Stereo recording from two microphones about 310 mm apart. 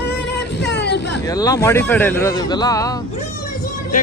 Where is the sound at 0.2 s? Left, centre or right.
Left.